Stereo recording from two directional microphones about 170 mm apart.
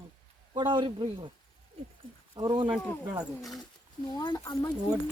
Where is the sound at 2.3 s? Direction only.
25° right (ahead or behind).